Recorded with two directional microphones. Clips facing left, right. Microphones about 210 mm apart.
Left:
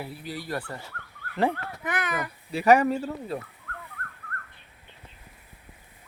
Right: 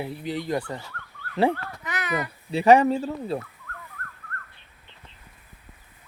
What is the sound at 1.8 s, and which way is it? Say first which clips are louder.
Speech: left 1 dB; 55° left (ahead or behind).